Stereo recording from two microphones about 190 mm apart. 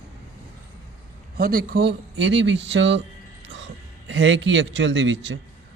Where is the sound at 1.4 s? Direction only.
50° right (ahead or behind).